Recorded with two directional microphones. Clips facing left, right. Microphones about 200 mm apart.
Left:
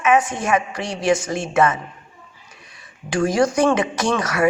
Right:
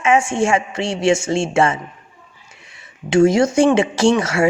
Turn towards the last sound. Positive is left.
turn(degrees=-25)  # may be behind; listen again after turning